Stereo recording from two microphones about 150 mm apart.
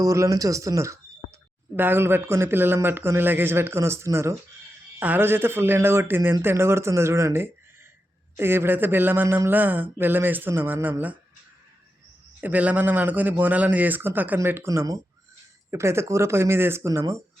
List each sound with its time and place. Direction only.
0.0 s speech: 20° right (ahead or behind)
12.4 s speech: 10° right (ahead or behind)